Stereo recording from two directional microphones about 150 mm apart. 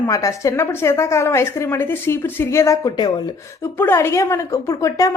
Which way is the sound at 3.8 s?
15° left (ahead or behind).